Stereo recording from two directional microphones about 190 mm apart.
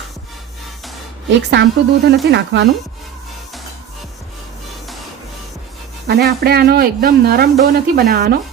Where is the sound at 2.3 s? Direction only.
65° right (ahead or behind).